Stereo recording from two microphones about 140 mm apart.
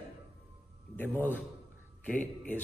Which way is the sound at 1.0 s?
15° left (ahead or behind).